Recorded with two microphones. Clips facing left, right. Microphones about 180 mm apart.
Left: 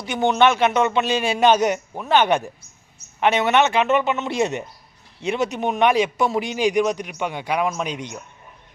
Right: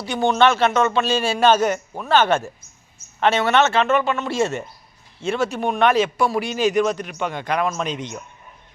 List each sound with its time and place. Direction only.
0.0 s a man's voice: 20° left (ahead or behind)